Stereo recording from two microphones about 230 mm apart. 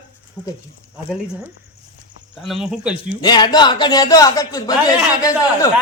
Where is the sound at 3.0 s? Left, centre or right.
Centre.